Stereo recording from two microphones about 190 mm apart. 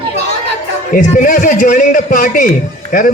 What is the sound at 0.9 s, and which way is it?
A man's voice, 45° left (ahead or behind).